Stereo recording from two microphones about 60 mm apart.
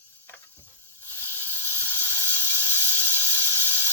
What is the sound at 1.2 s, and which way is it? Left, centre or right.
Hiss, left.